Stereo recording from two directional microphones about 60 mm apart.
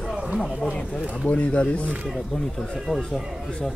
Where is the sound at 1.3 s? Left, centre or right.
Left.